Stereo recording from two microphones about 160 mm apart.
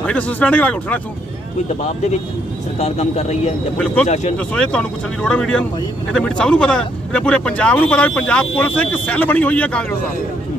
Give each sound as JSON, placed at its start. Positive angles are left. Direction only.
{"t": 0.0, "sound": "a man's voice", "side_deg": 10}
{"t": 2.8, "sound": "speech", "side_deg": 45}
{"t": 3.7, "sound": "a man's voice", "side_deg": 5}
{"t": 4.1, "sound": "speech", "side_deg": 45}
{"t": 4.6, "sound": "a man's voice", "side_deg": 5}